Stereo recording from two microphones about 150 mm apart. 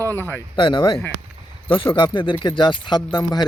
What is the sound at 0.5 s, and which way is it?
Speech, 35° left (ahead or behind).